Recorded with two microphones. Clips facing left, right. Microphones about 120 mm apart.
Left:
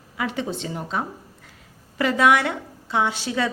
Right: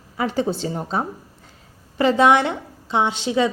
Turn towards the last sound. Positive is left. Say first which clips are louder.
# right 4 dB
turn(degrees=-20)  # may be behind; listen again after turning